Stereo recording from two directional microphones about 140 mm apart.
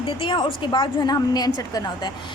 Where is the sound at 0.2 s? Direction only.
35° left (ahead or behind).